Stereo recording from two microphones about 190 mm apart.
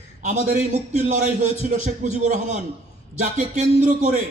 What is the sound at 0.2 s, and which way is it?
A man's voice, 40° right (ahead or behind).